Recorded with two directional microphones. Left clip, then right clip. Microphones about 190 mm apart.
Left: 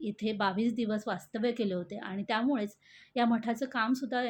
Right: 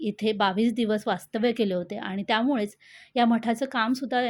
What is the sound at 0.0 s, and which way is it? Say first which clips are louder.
A woman's voice: right 7 dB; 40° right (ahead or behind).